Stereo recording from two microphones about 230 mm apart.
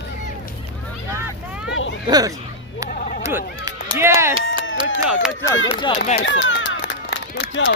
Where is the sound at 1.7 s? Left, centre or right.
Left.